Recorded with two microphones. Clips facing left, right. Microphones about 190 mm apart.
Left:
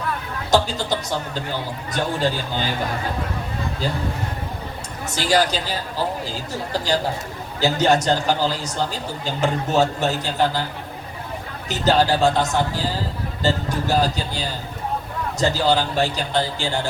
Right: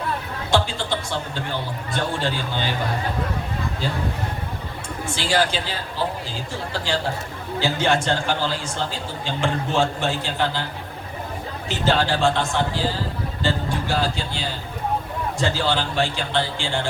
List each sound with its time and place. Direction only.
0.5 s a man's voice: 40° left (ahead or behind)
5.0 s a man's voice: 40° left (ahead or behind)
11.7 s a man's voice: 40° left (ahead or behind)
15.4 s a man's voice: 40° left (ahead or behind)